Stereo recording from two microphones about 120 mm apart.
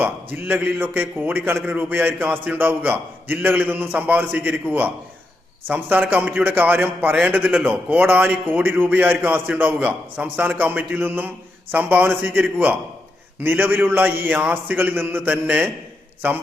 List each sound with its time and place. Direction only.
0.0 s a man's voice: 15° right (ahead or behind)